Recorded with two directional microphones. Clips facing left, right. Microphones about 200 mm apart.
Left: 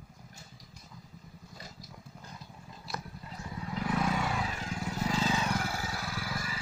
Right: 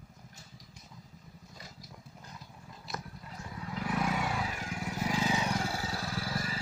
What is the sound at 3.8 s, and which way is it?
Vehicle, 10° right (ahead or behind).